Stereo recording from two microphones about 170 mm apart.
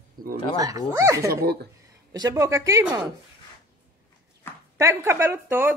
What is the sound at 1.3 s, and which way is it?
Speech, 70° right (ahead or behind).